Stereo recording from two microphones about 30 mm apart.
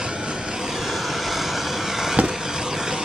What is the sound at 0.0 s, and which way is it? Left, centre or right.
Vehicle, right.